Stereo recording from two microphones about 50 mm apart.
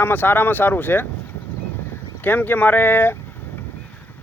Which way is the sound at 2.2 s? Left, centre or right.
Left.